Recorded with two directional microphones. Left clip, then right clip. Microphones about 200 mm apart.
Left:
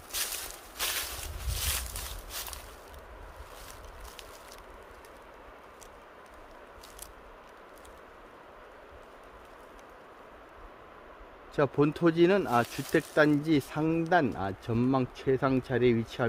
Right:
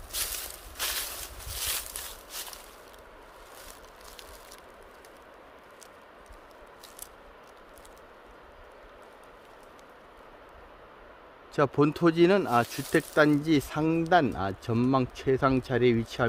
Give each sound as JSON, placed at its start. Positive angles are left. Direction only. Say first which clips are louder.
{"t": 0.1, "sound": "crushing", "louder": "even", "side_deg": -15}
{"t": 1.5, "sound": "a sound", "louder": "right 1 dB", "side_deg": -15}
{"t": 11.5, "sound": "speech", "louder": "right 2 dB", "side_deg": -20}